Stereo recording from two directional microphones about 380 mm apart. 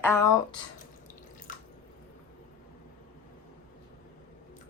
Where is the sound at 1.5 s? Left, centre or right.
Left.